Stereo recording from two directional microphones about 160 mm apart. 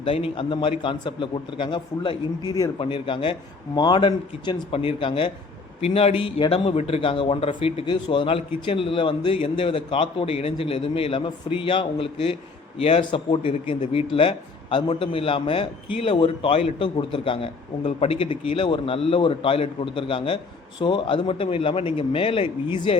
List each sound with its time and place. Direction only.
0.0 s a man's voice: 35° left (ahead or behind)